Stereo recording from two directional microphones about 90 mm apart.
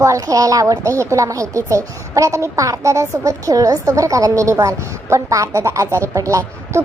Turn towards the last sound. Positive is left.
turn(degrees=-35)  # may be behind; listen again after turning